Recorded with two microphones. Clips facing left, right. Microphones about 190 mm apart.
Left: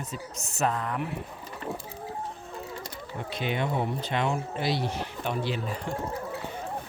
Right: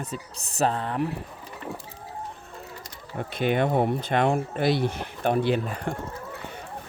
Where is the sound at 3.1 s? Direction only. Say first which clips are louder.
Right 6 dB; 50° right (ahead or behind).